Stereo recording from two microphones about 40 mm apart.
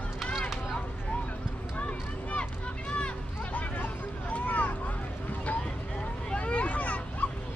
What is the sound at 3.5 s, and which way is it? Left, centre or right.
Hubbub, left.